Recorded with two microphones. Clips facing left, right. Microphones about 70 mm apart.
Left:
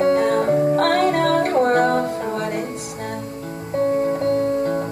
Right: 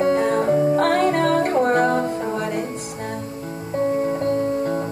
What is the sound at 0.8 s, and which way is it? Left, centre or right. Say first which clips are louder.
Music: left 1 dB; left.